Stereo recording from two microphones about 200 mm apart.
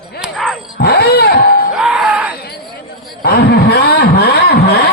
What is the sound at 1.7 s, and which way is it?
Ding-dong, 5° right (ahead or behind).